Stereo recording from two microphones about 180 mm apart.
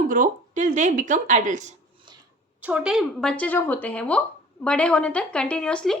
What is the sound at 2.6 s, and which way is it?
Speech, 5° right (ahead or behind).